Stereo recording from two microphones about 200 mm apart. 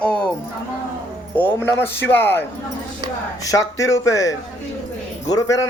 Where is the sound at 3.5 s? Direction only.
15° left (ahead or behind).